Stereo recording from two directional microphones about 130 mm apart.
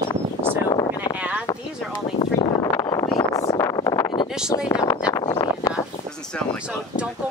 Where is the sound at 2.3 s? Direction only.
25° left (ahead or behind).